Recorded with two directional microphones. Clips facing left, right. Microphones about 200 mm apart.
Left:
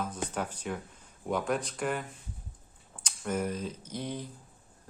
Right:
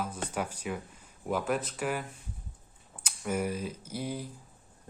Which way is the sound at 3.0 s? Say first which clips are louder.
Even; 10° right (ahead or behind).